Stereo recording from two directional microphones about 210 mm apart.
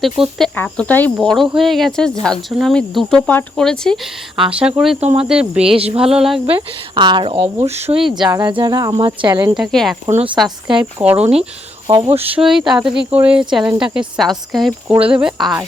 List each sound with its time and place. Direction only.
0.0 s speech: centre (ahead or behind)
4.9 s speech: 30° right (ahead or behind)
5.3 s speech: 5° right (ahead or behind)
5.7 s speech: 25° right (ahead or behind)
6.0 s speech: 5° right (ahead or behind)
6.4 s speech: 25° right (ahead or behind)
7.9 s speech: centre (ahead or behind)
8.3 s speech: 20° right (ahead or behind)
9.6 s speech: centre (ahead or behind)
10.1 s speech: 30° right (ahead or behind)
10.3 s speech: centre (ahead or behind)
11.9 s speech: 25° right (ahead or behind)
12.3 s speech: centre (ahead or behind)